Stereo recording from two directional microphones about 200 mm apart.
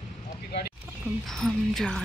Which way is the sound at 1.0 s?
Centre (ahead or behind).